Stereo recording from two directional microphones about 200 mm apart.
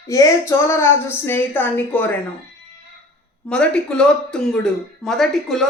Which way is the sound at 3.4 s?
5° left (ahead or behind).